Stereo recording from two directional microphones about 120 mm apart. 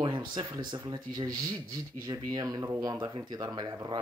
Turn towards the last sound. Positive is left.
turn(degrees=-40)  # may be behind; listen again after turning